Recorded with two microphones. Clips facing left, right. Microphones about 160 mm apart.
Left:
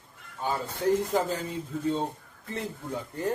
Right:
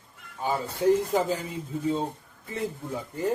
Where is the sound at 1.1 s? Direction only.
10° right (ahead or behind).